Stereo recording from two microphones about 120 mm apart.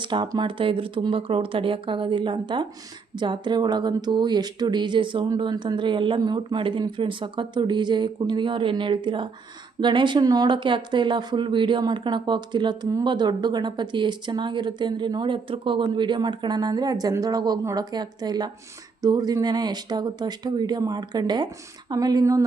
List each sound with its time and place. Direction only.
0.0 s speech: 40° right (ahead or behind)